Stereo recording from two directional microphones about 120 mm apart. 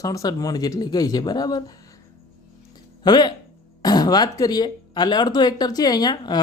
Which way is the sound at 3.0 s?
35° left (ahead or behind).